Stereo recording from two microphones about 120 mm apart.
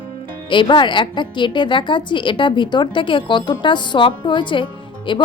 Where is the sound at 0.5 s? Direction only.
40° left (ahead or behind).